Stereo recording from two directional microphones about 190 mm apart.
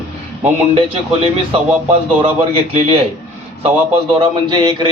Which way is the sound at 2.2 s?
30° right (ahead or behind).